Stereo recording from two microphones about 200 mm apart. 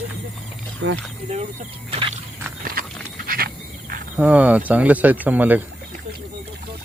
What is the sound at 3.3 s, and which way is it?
Insect, 45° right (ahead or behind).